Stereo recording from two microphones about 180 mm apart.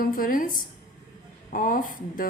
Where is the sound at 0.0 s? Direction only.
50° left (ahead or behind).